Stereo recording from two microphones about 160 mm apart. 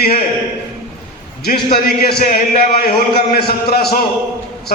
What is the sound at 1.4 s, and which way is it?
A man's voice, 75° left (ahead or behind).